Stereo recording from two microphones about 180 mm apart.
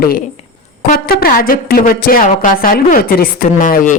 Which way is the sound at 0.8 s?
55° left (ahead or behind).